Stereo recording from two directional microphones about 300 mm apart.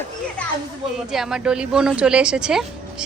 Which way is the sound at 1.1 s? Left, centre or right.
Centre.